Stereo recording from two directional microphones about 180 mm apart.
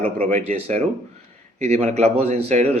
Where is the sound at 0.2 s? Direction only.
40° right (ahead or behind).